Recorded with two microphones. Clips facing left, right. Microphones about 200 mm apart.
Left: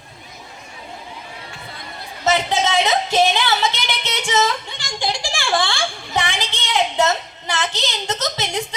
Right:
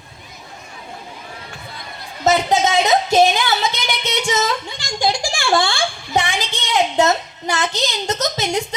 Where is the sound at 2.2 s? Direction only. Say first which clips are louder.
Right 3 dB; 45° right (ahead or behind).